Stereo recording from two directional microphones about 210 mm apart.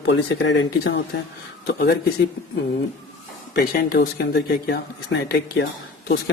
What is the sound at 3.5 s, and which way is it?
Speech, 45° left (ahead or behind).